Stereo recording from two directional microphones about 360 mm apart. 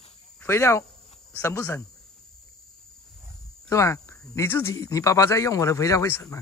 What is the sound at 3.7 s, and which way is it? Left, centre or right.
Speech, centre.